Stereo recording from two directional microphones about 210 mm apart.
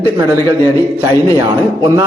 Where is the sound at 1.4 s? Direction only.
20° right (ahead or behind).